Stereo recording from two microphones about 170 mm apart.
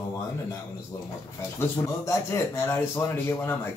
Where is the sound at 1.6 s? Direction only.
15° left (ahead or behind).